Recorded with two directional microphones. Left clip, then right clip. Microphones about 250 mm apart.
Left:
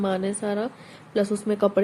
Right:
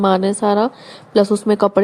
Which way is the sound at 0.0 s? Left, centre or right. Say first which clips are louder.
Right 11 dB; right.